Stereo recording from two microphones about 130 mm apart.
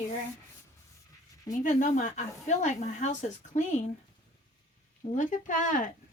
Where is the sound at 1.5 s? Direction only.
75° left (ahead or behind).